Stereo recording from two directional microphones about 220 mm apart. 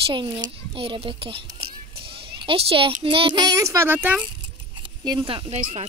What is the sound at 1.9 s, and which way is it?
Children playing, 25° right (ahead or behind).